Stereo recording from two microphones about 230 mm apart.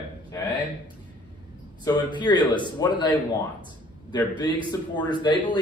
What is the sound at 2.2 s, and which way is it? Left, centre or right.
Speech, centre.